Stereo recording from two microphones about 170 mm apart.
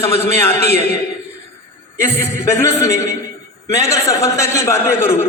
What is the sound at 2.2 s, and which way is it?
A man's voice, 15° left (ahead or behind).